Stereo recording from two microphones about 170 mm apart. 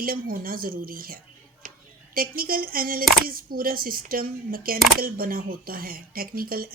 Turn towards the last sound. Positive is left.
turn(degrees=-60)  # may be behind; listen again after turning